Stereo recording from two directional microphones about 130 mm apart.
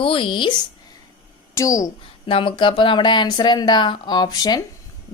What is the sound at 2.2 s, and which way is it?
Speech, 40° left (ahead or behind).